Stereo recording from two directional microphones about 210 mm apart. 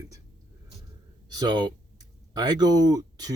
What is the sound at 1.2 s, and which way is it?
Speech, 20° right (ahead or behind).